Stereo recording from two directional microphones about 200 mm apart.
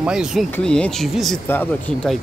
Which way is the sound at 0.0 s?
5° right (ahead or behind).